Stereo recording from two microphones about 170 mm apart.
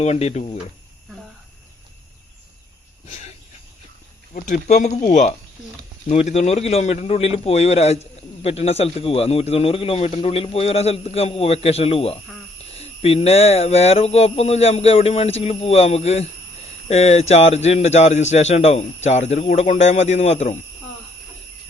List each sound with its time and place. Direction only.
0.0 s a man's voice: 40° left (ahead or behind)
3.1 s speech: 45° left (ahead or behind)
4.4 s a man's voice: 45° left (ahead or behind)